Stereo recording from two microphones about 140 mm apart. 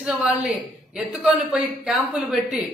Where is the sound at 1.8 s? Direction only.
5° right (ahead or behind).